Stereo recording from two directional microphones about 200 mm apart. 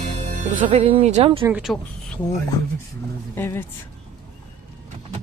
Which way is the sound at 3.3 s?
10° left (ahead or behind).